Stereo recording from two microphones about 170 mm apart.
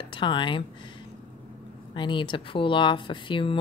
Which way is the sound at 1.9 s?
30° left (ahead or behind).